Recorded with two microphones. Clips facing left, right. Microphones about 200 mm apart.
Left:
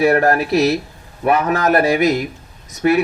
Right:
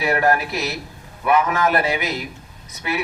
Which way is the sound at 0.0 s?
45° left (ahead or behind).